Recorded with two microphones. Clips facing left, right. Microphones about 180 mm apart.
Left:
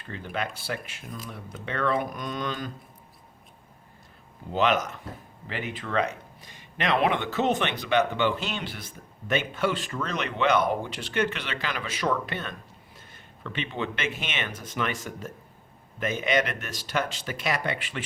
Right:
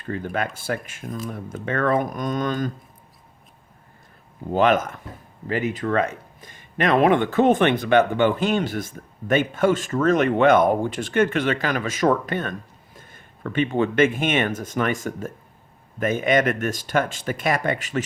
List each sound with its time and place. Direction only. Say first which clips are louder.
0.0 s speech: right 6 dB; 50° right (ahead or behind)
4.5 s speech: right 5 dB; 50° right (ahead or behind)